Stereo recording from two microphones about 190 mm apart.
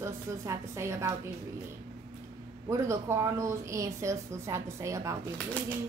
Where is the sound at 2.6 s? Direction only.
15° right (ahead or behind).